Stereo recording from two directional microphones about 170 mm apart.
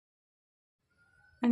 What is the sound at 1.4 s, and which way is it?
Music, centre (ahead or behind).